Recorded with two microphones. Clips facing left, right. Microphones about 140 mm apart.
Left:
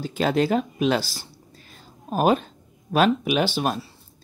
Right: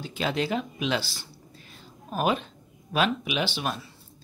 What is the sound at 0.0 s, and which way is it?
Speech, 45° left (ahead or behind).